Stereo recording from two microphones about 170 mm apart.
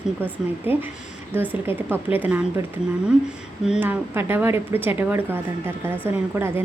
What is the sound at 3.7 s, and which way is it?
A woman's voice, 10° right (ahead or behind).